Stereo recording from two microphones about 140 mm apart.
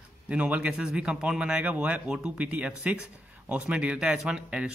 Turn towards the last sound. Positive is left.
turn(degrees=-10)  # may be behind; listen again after turning